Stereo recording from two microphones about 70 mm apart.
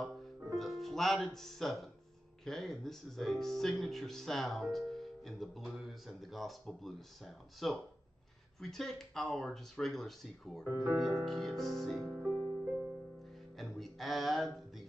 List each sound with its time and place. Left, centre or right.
0.0 s music: centre
2.4 s speech: centre
10.6 s speech: right
11.2 s speech: centre
12.4 s music: right
13.6 s a sound: centre